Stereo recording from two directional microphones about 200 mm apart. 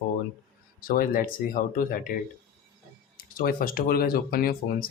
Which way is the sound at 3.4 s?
45° left (ahead or behind).